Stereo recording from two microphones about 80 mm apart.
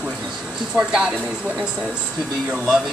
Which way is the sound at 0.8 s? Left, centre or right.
Centre.